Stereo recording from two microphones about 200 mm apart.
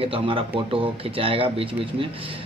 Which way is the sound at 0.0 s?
25° right (ahead or behind).